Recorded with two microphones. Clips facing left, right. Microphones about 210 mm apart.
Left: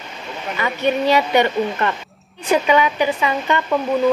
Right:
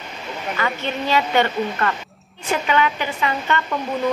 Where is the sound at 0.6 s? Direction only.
15° left (ahead or behind).